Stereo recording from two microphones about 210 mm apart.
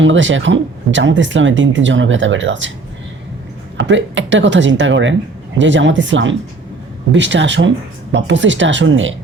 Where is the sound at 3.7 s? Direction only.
60° right (ahead or behind).